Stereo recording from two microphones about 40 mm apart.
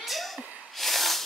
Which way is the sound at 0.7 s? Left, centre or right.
Centre.